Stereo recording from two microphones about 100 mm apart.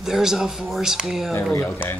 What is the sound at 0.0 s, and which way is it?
Speech, 5° right (ahead or behind).